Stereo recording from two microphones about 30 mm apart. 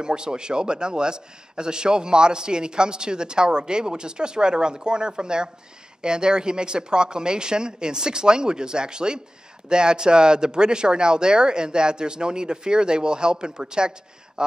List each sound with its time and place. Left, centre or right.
0.0 s a man's voice: right